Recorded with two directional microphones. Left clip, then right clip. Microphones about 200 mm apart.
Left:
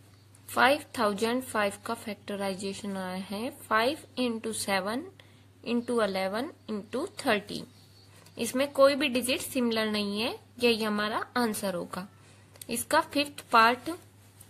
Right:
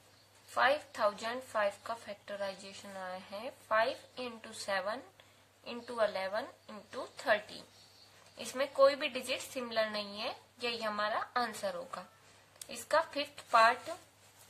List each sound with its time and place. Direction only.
0.6 s a woman's voice: 45° left (ahead or behind)